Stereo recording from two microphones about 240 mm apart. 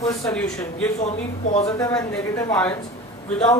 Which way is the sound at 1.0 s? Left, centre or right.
Left.